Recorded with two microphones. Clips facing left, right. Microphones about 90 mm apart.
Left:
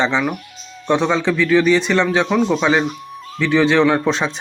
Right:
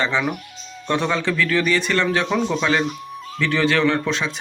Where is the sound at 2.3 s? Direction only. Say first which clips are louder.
Left 4 dB; 5° left (ahead or behind).